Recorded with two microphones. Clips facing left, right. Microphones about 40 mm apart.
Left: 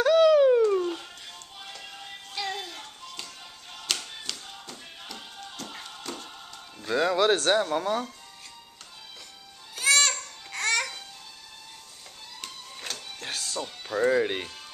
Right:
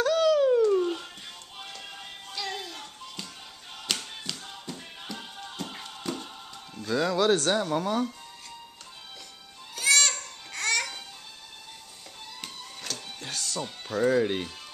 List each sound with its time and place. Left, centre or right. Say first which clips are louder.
0.0 s a sound: left 4 dB; left
0.7 s dog: right 1 dB; centre
2.3 s music: left 2 dB; centre
3.8 s tap: even; centre
5.7 s music: right 3 dB; centre
6.8 s a sound: left 2 dB; left
7.6 s speech: even; centre
9.8 s babbling: left 1 dB; centre
13.2 s music: left 2 dB; centre
13.8 s speech: even; centre